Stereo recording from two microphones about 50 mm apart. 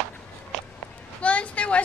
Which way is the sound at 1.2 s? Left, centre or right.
Left.